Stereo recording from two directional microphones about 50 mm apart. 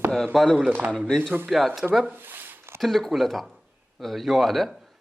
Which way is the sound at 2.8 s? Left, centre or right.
Centre.